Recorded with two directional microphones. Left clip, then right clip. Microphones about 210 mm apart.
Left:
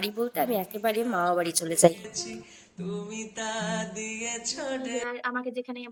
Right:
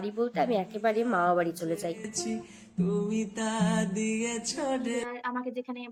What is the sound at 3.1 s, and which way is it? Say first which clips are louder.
Music: right 2 dB; 50° right (ahead or behind).